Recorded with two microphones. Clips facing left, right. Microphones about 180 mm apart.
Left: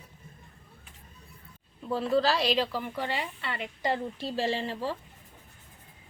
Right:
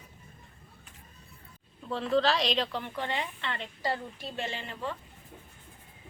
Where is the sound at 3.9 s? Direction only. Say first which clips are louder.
Left 5 dB; 30° left (ahead or behind).